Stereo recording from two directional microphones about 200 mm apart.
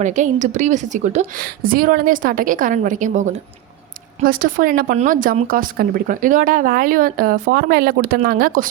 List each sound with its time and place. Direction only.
0.0 s speech: 35° right (ahead or behind)